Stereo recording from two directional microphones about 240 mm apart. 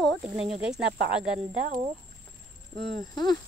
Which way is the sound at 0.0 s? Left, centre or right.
Centre.